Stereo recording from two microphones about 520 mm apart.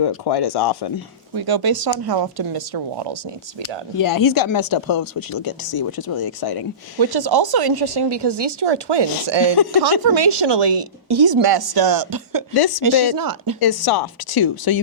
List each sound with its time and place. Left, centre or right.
0.3 s speech: left
1.4 s speech: right
3.9 s speech: left
7.0 s speech: right
13.6 s speech: left